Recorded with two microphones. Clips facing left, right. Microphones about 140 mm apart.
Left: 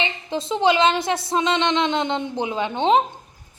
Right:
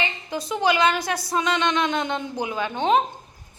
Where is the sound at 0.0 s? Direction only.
25° left (ahead or behind).